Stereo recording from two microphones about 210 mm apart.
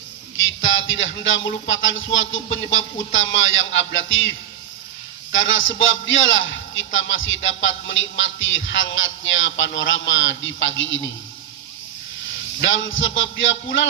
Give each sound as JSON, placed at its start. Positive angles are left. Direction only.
{"t": 0.6, "sound": "a man's voice", "side_deg": 65}
{"t": 5.3, "sound": "a man's voice", "side_deg": 65}
{"t": 12.6, "sound": "a man's voice", "side_deg": 65}